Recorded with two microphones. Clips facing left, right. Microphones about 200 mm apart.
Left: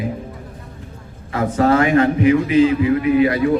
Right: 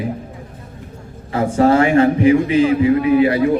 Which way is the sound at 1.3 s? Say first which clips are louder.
Right 2 dB; 30° right (ahead or behind).